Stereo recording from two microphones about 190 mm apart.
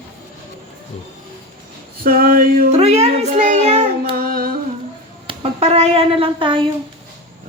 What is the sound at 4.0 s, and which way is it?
Humming, 50° right (ahead or behind).